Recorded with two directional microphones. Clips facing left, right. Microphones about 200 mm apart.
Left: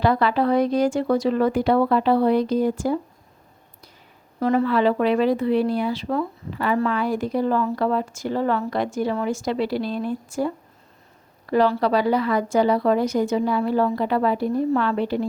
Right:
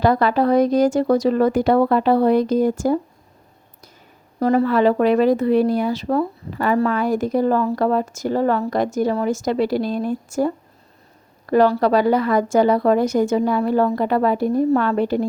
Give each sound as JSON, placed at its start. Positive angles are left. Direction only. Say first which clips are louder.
{"t": 0.0, "sound": "speech", "louder": "right 3 dB", "side_deg": -45}
{"t": 4.4, "sound": "speech", "louder": "right 3 dB", "side_deg": -40}